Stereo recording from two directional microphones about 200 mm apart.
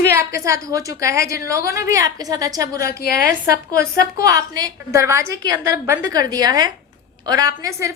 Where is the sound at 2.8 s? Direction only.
50° left (ahead or behind).